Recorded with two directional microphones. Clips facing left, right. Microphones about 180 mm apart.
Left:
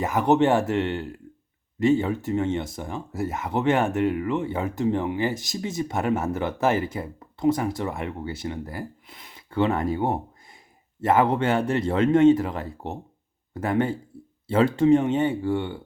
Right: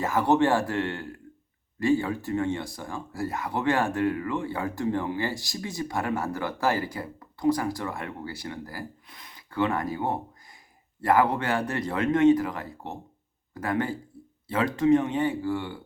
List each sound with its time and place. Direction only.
0.0 s speech: 20° left (ahead or behind)